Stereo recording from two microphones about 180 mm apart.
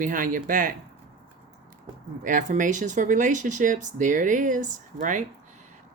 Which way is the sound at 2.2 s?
45° right (ahead or behind).